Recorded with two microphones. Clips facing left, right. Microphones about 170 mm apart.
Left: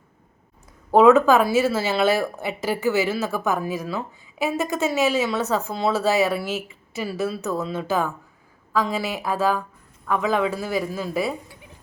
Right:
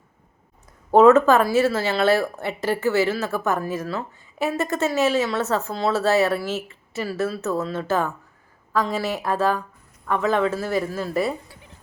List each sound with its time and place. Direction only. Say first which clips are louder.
0.9 s speech: right 1 dB; centre (ahead or behind)
1.9 s speech: right 1 dB; 15° left (ahead or behind)
2.2 s speech: right 1 dB; 5° left (ahead or behind)
2.8 s speech: right 1 dB; 15° left (ahead or behind)
3.1 s speech: even; centre (ahead or behind)